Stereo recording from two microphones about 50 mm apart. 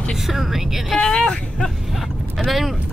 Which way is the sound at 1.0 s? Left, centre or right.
Centre.